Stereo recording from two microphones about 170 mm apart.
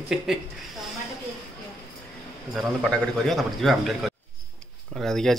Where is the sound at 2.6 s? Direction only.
5° left (ahead or behind).